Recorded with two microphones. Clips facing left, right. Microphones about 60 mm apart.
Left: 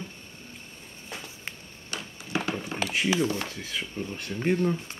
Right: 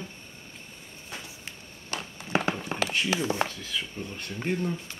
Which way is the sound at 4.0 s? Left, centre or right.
Left.